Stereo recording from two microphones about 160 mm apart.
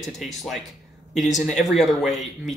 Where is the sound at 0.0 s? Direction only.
Centre (ahead or behind).